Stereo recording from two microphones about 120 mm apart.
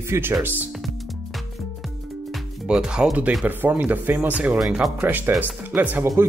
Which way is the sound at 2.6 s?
5° right (ahead or behind).